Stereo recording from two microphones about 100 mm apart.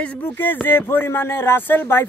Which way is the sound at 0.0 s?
15° left (ahead or behind).